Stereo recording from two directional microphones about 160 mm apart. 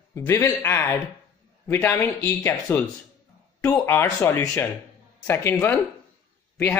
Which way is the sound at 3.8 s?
15° left (ahead or behind).